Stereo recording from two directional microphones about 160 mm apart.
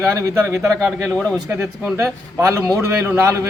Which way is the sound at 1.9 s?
15° right (ahead or behind).